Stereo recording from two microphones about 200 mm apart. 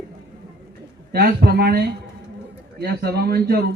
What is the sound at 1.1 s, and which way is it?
Speech, 50° right (ahead or behind).